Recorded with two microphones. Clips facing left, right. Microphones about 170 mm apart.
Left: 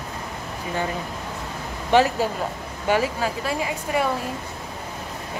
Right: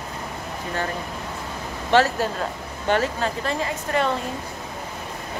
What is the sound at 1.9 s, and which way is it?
Speech, 15° left (ahead or behind).